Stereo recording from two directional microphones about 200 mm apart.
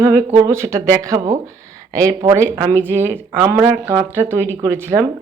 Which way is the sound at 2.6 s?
10° right (ahead or behind).